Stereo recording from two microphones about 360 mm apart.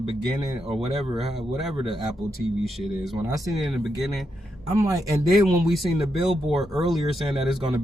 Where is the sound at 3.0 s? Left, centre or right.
Centre.